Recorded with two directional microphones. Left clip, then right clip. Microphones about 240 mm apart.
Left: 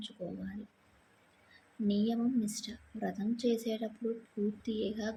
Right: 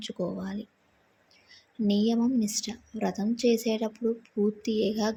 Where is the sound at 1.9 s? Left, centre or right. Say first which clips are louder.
Right 7 dB; right.